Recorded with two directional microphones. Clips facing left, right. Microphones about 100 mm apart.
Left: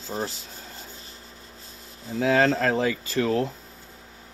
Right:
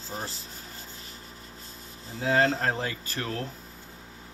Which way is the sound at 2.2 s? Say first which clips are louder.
Left 3 dB; 90° left.